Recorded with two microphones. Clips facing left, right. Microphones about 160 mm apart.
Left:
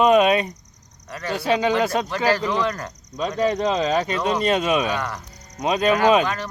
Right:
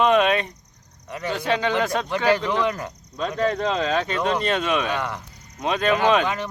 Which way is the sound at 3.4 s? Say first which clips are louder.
Left 2 dB; 10° left (ahead or behind).